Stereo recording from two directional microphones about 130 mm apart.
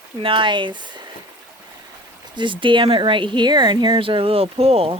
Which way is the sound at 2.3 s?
40° right (ahead or behind).